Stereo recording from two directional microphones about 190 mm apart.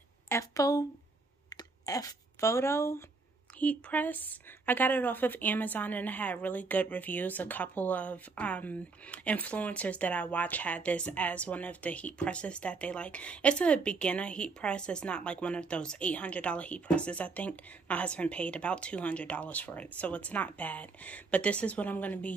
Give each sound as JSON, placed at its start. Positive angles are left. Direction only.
{"t": 0.3, "sound": "a woman's voice", "side_deg": 15}
{"t": 1.5, "sound": "a sound", "side_deg": 20}
{"t": 3.5, "sound": "a woman's voice", "side_deg": 10}